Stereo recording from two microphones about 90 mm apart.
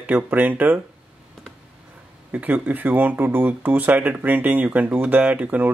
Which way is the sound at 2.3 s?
15° right (ahead or behind).